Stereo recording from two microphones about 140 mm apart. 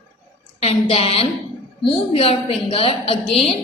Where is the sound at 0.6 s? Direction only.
45° left (ahead or behind).